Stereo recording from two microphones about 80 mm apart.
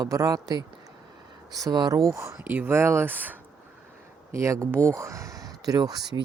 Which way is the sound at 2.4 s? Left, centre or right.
Right.